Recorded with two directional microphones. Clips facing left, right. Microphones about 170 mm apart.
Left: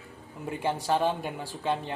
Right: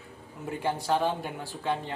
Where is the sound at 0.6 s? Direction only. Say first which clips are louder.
Left 1 dB; 15° left (ahead or behind).